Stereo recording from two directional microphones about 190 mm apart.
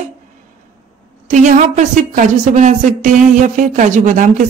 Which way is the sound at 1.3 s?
40° right (ahead or behind).